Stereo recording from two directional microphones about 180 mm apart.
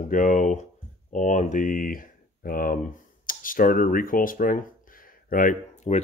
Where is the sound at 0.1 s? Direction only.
45° left (ahead or behind).